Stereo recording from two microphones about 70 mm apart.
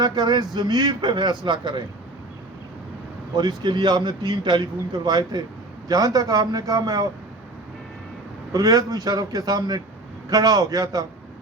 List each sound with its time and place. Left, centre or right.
0.0 s a man's voice: right
3.3 s a man's voice: right
5.9 s a man's voice: right
8.5 s a man's voice: right